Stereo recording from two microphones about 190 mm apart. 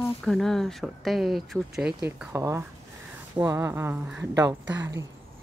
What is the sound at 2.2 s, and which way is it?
Speech, 15° right (ahead or behind).